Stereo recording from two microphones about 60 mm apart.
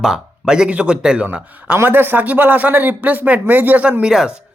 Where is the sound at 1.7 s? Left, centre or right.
Right.